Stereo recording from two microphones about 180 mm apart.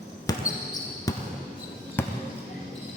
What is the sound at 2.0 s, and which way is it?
Basketball bounce, 10° left (ahead or behind).